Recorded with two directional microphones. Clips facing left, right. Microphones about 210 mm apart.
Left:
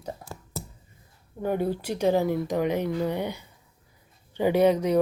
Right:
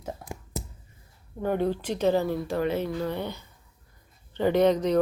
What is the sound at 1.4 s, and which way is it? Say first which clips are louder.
Speech: even; 10° left (ahead or behind).